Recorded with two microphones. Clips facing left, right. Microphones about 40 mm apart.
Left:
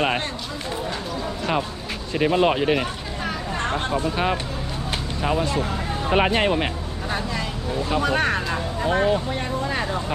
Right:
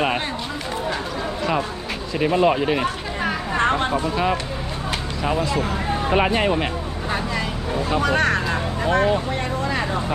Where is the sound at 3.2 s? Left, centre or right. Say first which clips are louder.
Right 6 dB; right.